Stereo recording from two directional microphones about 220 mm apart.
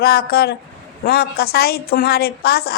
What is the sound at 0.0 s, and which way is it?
A woman's voice, 45° left (ahead or behind).